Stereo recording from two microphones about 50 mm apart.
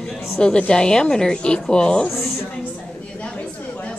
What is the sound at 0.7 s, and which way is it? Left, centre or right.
A woman's voice, centre.